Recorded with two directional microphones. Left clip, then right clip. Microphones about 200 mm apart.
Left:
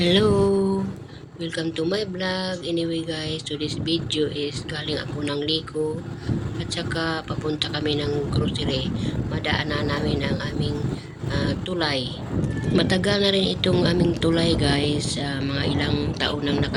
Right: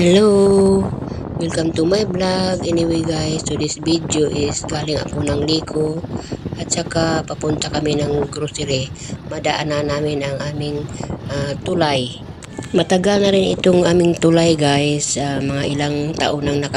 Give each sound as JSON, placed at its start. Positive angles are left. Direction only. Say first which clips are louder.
{"t": 0.0, "sound": "a sound", "louder": "right 7 dB", "side_deg": -30}
{"t": 1.4, "sound": "speech", "louder": "right 8 dB", "side_deg": -35}
{"t": 6.7, "sound": "speech", "louder": "right 8 dB", "side_deg": -30}
{"t": 9.4, "sound": "speech", "louder": "right 7 dB", "side_deg": -35}
{"t": 11.3, "sound": "speech", "louder": "right 6 dB", "side_deg": -35}
{"t": 12.7, "sound": "speech", "louder": "right 7 dB", "side_deg": -25}